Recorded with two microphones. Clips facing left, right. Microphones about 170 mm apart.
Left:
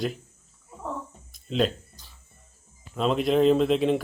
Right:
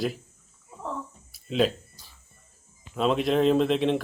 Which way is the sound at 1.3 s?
Centre (ahead or behind).